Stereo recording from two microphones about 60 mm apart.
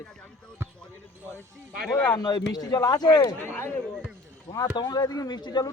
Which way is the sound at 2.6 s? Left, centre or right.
Left.